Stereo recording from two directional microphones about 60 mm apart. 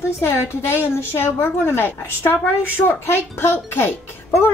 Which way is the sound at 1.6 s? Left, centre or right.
Left.